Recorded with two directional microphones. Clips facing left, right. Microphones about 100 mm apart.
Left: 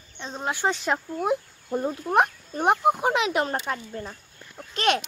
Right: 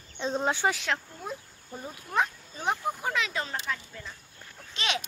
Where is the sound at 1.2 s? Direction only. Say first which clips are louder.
Left 13 dB; 70° left (ahead or behind).